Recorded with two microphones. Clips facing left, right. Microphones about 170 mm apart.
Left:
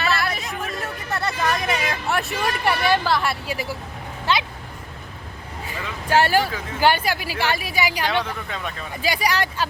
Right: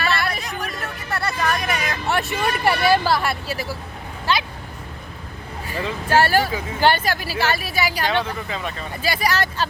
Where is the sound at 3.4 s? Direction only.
15° left (ahead or behind).